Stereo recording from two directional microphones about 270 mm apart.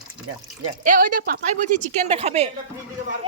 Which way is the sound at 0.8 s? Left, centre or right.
Right.